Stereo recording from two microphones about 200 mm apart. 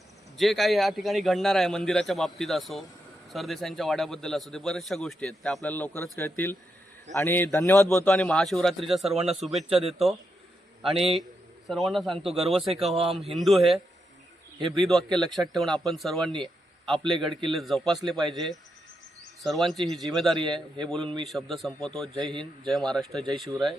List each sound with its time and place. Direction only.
0.3 s a man's voice: centre (ahead or behind)
11.7 s a man's voice: centre (ahead or behind)
12.2 s speech: 30° right (ahead or behind)
12.5 s a man's voice: centre (ahead or behind)
19.4 s a man's voice: centre (ahead or behind)